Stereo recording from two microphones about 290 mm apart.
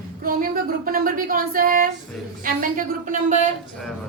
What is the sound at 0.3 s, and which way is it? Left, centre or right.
Speech, right.